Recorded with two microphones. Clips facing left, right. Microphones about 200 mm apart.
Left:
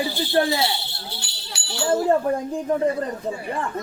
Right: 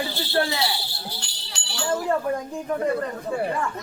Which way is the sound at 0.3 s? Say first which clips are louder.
Left 3 dB; 20° left (ahead or behind).